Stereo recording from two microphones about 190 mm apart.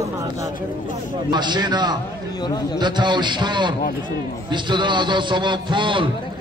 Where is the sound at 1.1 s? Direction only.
25° right (ahead or behind).